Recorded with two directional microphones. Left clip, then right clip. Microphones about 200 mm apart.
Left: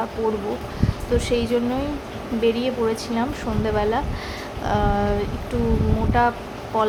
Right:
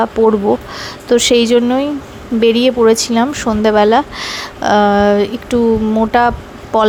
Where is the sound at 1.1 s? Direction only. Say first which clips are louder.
Right 12 dB; 45° right (ahead or behind).